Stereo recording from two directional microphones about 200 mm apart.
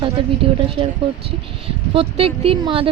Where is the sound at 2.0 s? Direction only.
30° right (ahead or behind).